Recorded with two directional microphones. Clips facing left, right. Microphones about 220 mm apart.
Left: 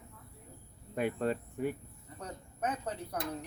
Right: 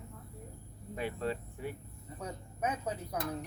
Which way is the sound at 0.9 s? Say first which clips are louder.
Left 4 dB; 50° left (ahead or behind).